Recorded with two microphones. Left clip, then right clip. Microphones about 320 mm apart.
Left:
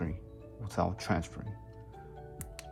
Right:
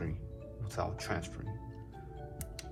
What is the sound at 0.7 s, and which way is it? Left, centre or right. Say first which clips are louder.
Speech: left 4 dB; left.